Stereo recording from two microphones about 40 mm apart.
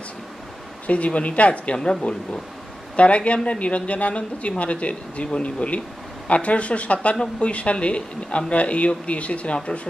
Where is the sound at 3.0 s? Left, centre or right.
Left.